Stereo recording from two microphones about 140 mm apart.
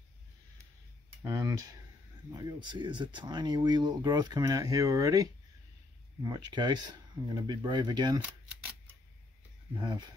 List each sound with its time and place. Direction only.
1.2 s speech: 20° right (ahead or behind)
2.3 s speech: 35° right (ahead or behind)
9.8 s speech: 30° right (ahead or behind)